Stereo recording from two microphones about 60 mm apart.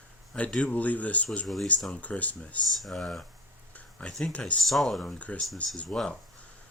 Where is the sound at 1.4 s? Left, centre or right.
Centre.